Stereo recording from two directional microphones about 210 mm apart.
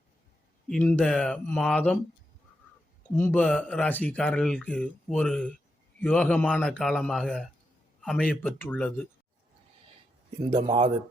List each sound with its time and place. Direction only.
0.7 s speech: 5° left (ahead or behind)
3.2 s speech: 10° left (ahead or behind)
10.7 s speech: 25° right (ahead or behind)